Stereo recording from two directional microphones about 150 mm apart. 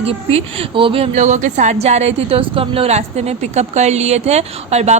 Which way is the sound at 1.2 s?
55° right (ahead or behind).